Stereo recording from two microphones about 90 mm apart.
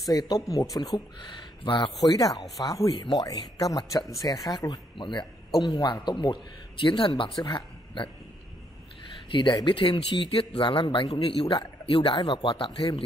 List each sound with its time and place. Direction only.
0.1 s speech: 45° left (ahead or behind)
1.6 s speech: 70° left (ahead or behind)
2.0 s speech: 40° left (ahead or behind)
2.9 s speech: 65° left (ahead or behind)
3.2 s speech: 40° left (ahead or behind)
4.9 s a man's voice: 65° left (ahead or behind)
7.2 s speech: 55° left (ahead or behind)
9.3 s speech: 60° left (ahead or behind); by 13.0 s 80° left